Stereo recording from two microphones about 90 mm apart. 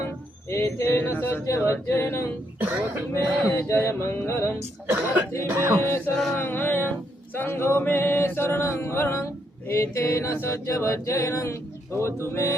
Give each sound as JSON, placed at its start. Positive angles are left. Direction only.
{"t": 0.5, "sound": "music", "side_deg": 30}
{"t": 2.6, "sound": "speech", "side_deg": -25}
{"t": 3.1, "sound": "music", "side_deg": 30}
{"t": 4.9, "sound": "speech", "side_deg": -20}
{"t": 6.3, "sound": "music", "side_deg": 25}